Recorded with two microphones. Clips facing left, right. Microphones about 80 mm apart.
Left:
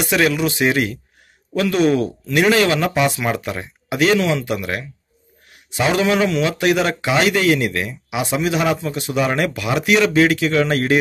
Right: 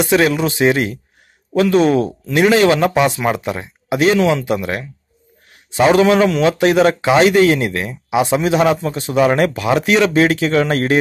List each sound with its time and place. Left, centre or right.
0.0 s speech: right